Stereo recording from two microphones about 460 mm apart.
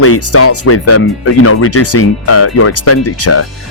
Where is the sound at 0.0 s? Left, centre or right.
Left.